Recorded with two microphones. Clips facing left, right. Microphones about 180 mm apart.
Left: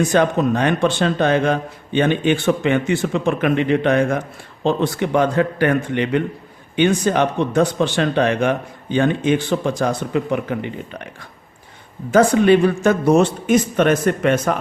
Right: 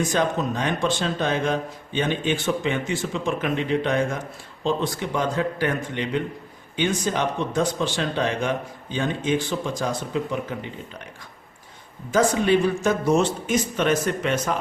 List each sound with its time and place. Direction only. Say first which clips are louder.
0.0 s speech: left 7 dB; 65° left (ahead or behind)